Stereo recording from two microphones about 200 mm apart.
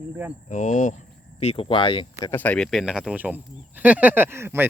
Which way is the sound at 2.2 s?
10° left (ahead or behind).